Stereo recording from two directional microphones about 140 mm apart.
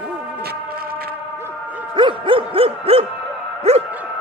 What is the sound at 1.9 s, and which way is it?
Music, 40° right (ahead or behind).